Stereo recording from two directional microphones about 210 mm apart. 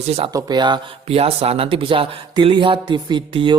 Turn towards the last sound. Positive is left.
turn(degrees=-25)  # may be behind; listen again after turning